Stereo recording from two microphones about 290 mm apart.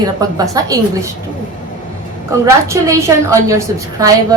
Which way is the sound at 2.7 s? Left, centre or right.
Centre.